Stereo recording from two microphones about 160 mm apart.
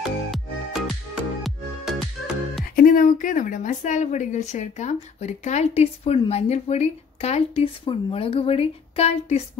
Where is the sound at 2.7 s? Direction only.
60° left (ahead or behind).